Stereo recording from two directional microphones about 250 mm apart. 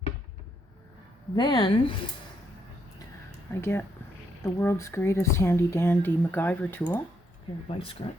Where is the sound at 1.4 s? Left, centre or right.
Centre.